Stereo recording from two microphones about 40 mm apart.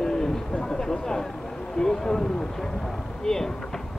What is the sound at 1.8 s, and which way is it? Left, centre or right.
Speech, centre.